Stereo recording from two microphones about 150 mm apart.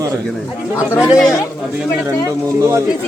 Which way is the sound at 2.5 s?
20° right (ahead or behind).